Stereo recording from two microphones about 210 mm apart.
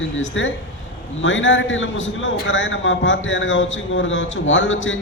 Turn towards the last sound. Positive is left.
turn(degrees=65)  # may be behind; listen again after turning